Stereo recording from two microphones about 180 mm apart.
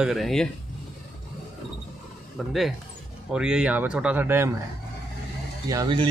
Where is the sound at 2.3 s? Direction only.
Centre (ahead or behind).